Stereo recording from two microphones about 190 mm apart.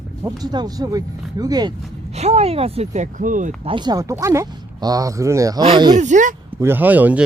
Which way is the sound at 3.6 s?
25° right (ahead or behind).